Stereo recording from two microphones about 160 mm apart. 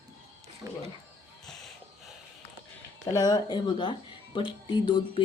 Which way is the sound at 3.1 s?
25° left (ahead or behind).